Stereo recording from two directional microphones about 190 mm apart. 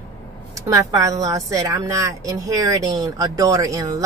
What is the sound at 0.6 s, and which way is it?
Speech, 20° right (ahead or behind).